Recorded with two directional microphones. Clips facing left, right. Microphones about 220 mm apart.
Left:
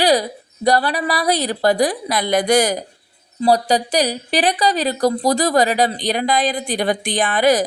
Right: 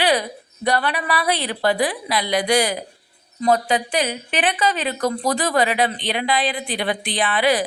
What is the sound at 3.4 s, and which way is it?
A woman's voice, 35° left (ahead or behind).